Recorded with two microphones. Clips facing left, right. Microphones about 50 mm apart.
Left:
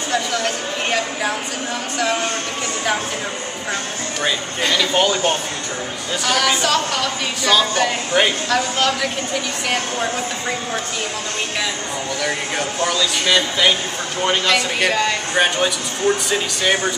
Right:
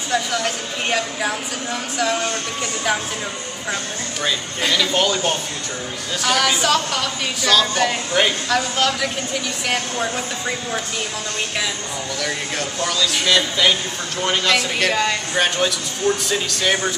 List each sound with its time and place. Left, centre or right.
0.1 s speech: centre
4.2 s speech: centre
12.2 s speech: centre